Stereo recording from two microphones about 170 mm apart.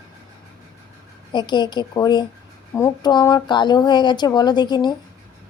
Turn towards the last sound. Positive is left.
turn(degrees=25)  # may be behind; listen again after turning